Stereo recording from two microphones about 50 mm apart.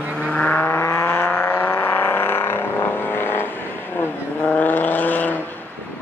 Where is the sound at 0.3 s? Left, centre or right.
Left.